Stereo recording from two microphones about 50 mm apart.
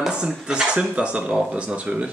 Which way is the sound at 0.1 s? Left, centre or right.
Centre.